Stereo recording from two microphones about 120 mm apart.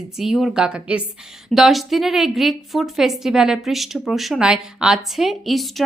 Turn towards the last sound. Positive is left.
turn(degrees=0)  # may be behind; listen again after turning